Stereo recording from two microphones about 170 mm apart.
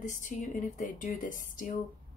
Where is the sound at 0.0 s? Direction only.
50° left (ahead or behind).